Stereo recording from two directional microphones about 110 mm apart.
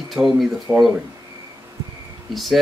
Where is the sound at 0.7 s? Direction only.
25° right (ahead or behind).